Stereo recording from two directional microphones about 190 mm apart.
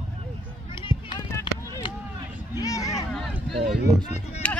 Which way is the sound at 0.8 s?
25° left (ahead or behind).